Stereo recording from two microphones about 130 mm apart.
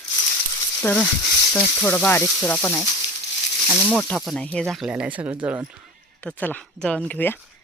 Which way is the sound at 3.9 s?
5° left (ahead or behind).